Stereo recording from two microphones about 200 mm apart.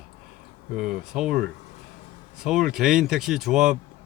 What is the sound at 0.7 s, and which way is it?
Speech, 45° right (ahead or behind).